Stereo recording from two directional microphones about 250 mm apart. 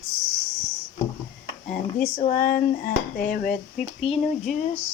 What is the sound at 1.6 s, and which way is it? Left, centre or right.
Speech, left.